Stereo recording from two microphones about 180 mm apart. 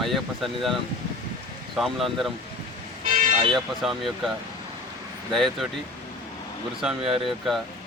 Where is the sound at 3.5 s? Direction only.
Centre (ahead or behind).